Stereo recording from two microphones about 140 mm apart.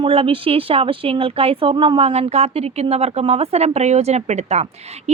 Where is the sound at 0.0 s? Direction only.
40° right (ahead or behind).